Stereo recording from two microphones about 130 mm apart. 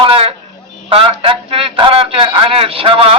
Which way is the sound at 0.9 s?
40° right (ahead or behind).